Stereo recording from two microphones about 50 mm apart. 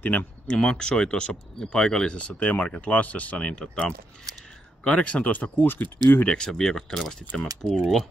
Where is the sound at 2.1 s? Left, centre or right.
Left.